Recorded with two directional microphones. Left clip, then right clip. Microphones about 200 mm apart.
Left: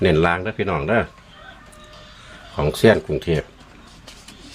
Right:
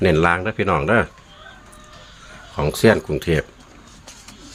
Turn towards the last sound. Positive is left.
turn(degrees=-15)  # may be behind; listen again after turning